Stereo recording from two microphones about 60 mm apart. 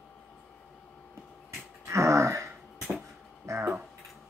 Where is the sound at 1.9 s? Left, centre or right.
Right.